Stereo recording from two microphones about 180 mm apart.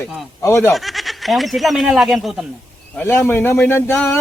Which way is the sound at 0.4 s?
15° left (ahead or behind).